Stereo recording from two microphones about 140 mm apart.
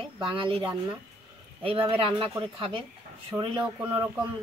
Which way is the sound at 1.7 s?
40° right (ahead or behind).